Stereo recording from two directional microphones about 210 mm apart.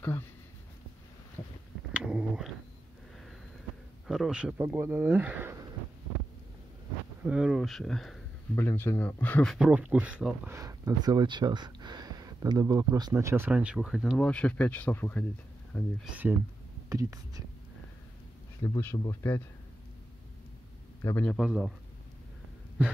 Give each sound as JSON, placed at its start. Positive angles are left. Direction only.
{"t": 2.0, "sound": "a sound", "side_deg": -5}
{"t": 4.1, "sound": "speech", "side_deg": -5}
{"t": 7.2, "sound": "speech", "side_deg": -5}
{"t": 16.9, "sound": "speech", "side_deg": -15}
{"t": 18.6, "sound": "speech", "side_deg": 15}
{"t": 21.0, "sound": "speech", "side_deg": 10}